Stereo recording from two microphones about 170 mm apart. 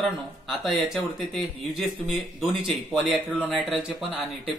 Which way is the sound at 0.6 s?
Centre (ahead or behind).